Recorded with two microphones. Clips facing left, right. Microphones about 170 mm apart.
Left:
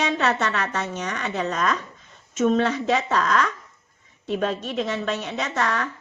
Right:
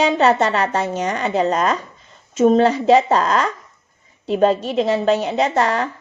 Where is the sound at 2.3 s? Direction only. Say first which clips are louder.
Right 7 dB; 35° right (ahead or behind).